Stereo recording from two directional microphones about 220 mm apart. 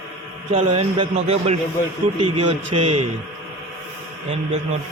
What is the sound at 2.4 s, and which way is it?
Speech, 90° right.